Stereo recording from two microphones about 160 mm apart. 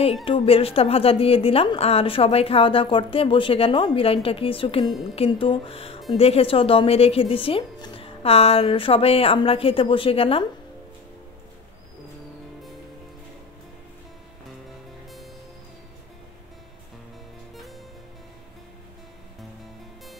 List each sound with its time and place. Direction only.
0.0 s a woman's voice: 35° left (ahead or behind)